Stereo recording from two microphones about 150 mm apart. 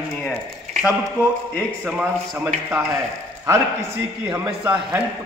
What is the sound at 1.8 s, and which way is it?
A man's voice, 5° right (ahead or behind).